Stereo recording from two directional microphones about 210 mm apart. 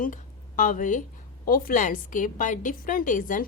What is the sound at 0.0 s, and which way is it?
A woman's voice, 40° left (ahead or behind).